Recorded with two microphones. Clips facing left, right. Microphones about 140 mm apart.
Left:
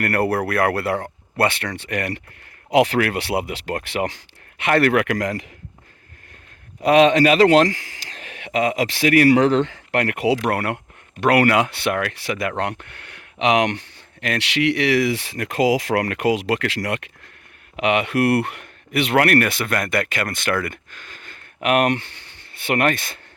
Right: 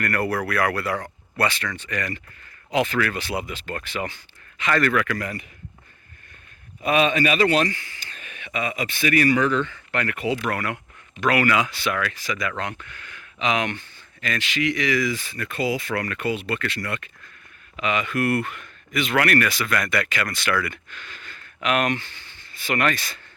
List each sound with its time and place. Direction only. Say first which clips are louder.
0.0 s speech: left 4 dB; 60° left (ahead or behind); by 5.5 s 90° left
6.8 s a man's voice: left 7 dB; 75° left (ahead or behind)
9.9 s speech: left 6 dB; 70° left (ahead or behind)
17.7 s speech: left 5 dB; 70° left (ahead or behind); by 23.2 s 55° left (ahead or behind)